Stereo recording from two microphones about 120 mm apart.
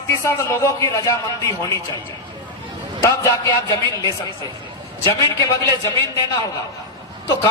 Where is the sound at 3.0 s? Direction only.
25° left (ahead or behind).